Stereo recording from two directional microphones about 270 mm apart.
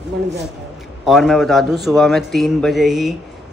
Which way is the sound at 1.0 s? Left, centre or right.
Centre.